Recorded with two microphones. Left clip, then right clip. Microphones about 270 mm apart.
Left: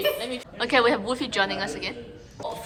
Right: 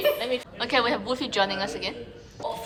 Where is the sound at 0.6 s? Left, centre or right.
Centre.